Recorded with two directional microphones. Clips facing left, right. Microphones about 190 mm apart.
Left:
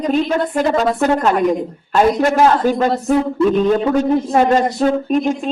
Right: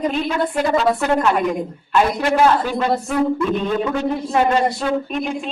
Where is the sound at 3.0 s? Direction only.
30° left (ahead or behind).